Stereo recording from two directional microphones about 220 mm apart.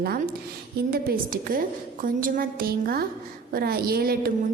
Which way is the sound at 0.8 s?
40° right (ahead or behind).